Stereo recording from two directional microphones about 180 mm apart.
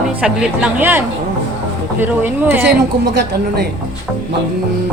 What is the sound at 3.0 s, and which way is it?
Speech, 65° right (ahead or behind).